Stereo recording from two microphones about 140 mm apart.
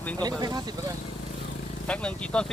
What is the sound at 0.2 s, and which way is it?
Speech, 30° right (ahead or behind).